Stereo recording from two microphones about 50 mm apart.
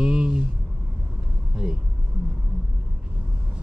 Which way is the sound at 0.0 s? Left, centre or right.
Centre.